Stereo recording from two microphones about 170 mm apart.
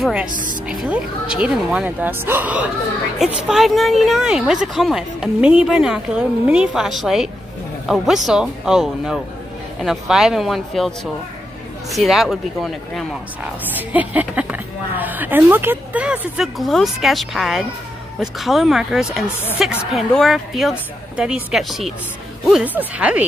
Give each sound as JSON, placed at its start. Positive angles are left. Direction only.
{"t": 0.0, "sound": "a woman's voice", "side_deg": -5}
{"t": 11.9, "sound": "a woman's voice", "side_deg": 0}